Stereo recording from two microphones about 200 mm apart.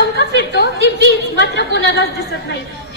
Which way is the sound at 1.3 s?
60° left (ahead or behind).